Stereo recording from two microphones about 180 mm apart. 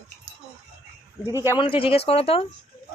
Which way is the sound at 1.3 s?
15° right (ahead or behind).